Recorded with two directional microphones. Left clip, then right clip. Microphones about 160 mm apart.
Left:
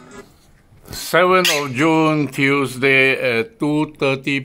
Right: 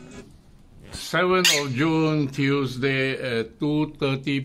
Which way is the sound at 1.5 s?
35° left (ahead or behind).